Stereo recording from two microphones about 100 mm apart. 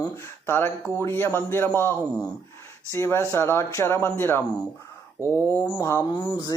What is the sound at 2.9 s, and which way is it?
Speech, 25° left (ahead or behind).